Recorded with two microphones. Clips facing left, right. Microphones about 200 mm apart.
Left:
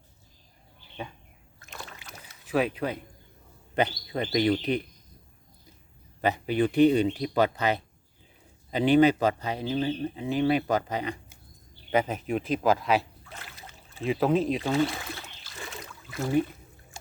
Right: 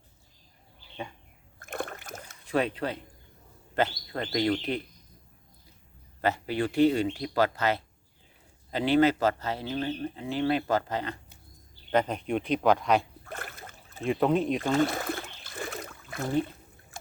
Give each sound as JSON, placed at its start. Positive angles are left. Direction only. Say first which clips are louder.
{"t": 1.5, "sound": "a sound", "louder": "right 9 dB", "side_deg": -55}
{"t": 2.4, "sound": "speech", "louder": "left 1 dB", "side_deg": 5}
{"t": 6.2, "sound": "speech", "louder": "left 3 dB", "side_deg": 15}
{"t": 13.2, "sound": "rowboat", "louder": "right 5 dB", "side_deg": -55}
{"t": 14.0, "sound": "speech", "louder": "left 1 dB", "side_deg": 0}
{"t": 14.6, "sound": "a sound", "louder": "right 1 dB", "side_deg": -50}